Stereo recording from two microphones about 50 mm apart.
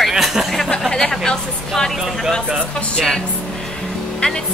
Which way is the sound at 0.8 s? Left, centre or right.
Centre.